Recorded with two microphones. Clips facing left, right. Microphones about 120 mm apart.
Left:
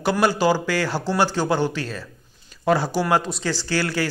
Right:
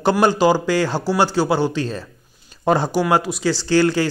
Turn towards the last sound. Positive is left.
turn(degrees=-20)  # may be behind; listen again after turning